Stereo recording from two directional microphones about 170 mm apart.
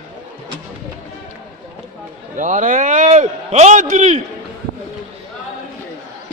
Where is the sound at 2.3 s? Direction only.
50° right (ahead or behind).